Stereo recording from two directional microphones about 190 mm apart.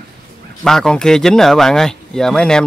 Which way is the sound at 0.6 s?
5° left (ahead or behind).